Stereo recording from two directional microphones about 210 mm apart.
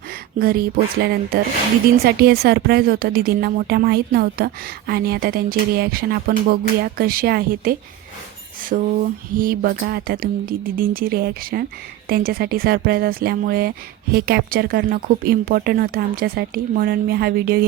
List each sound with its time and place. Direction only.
0.3 s a woman's voice: 45° right (ahead or behind)
9.3 s a woman's voice: 40° right (ahead or behind)